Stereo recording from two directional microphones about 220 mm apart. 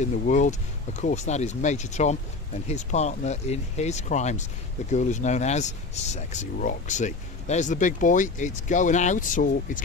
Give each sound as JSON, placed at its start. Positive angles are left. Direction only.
{"t": 0.3, "sound": "speech", "side_deg": 35}